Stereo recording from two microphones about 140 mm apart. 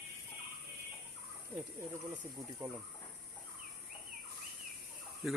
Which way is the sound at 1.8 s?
10° right (ahead or behind).